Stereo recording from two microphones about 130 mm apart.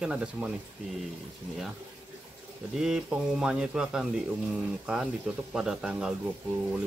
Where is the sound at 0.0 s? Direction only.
5° right (ahead or behind).